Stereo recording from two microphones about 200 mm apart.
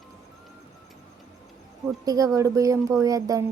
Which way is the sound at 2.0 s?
15° right (ahead or behind).